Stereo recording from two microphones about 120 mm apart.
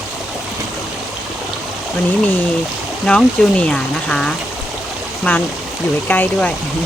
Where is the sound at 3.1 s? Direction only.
10° left (ahead or behind).